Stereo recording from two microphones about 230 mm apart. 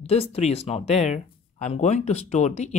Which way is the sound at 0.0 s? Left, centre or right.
Left.